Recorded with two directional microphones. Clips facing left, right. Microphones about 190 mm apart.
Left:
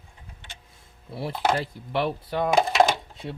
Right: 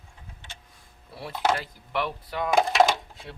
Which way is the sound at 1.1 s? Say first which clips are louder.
Left 7 dB; 25° left (ahead or behind).